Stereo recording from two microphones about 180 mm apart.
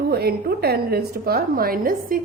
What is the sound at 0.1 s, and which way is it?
A woman's voice, 60° right (ahead or behind).